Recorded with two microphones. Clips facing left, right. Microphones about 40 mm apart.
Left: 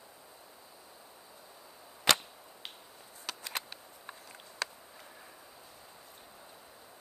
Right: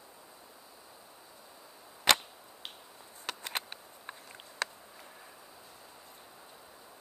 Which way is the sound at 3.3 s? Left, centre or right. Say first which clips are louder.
Right 2 dB; right.